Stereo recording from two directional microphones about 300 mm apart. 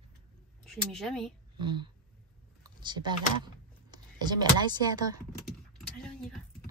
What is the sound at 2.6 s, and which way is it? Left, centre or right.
Computer keyboard, centre.